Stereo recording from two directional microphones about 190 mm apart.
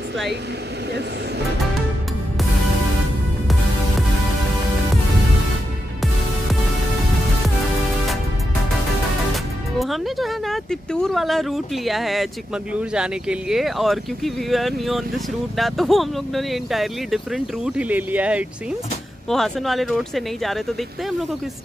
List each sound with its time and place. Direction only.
9.8 s speech: centre (ahead or behind)